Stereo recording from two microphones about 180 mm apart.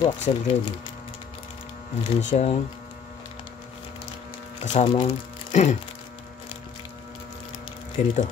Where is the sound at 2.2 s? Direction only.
40° left (ahead or behind).